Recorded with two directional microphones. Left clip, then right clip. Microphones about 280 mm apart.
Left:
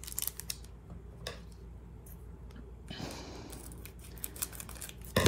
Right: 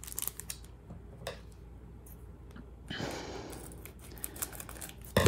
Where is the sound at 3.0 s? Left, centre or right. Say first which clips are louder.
Right 5 dB; right.